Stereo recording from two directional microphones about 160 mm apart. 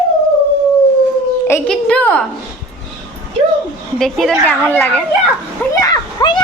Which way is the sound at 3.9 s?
Centre (ahead or behind).